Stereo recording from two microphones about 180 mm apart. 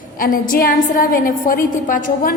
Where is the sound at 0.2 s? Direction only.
50° left (ahead or behind).